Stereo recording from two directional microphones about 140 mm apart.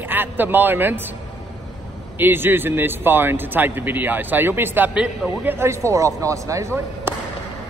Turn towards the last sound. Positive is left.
turn(degrees=-20)  # may be behind; listen again after turning